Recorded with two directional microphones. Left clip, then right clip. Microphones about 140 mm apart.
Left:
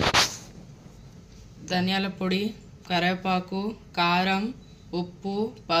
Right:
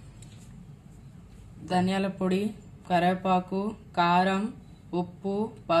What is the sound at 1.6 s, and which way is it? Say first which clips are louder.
Speech: left 1 dB; 55° right (ahead or behind).